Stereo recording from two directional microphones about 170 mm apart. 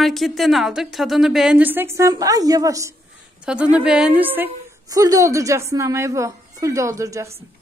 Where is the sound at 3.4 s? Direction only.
5° right (ahead or behind).